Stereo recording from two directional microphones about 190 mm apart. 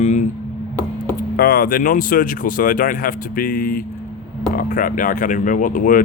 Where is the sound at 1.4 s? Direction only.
50° left (ahead or behind).